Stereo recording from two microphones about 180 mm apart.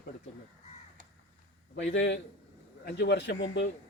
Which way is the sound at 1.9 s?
90° left.